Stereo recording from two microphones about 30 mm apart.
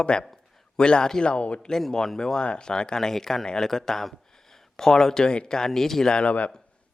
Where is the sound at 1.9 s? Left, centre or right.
Centre.